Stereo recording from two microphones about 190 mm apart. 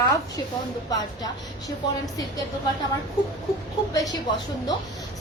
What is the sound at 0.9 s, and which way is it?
Speech, 20° left (ahead or behind).